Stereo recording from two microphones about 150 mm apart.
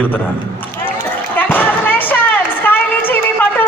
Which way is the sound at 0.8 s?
15° left (ahead or behind).